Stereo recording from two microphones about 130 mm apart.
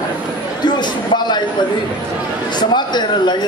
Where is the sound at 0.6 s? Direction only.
35° left (ahead or behind).